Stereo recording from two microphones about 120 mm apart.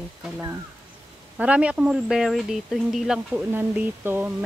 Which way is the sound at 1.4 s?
10° right (ahead or behind).